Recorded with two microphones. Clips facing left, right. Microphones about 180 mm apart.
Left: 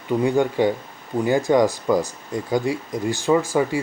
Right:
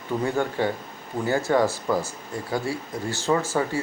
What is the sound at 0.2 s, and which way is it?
Speech, 15° left (ahead or behind).